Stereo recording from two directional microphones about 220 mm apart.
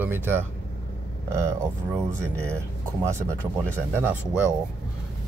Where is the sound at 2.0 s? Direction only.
10° right (ahead or behind).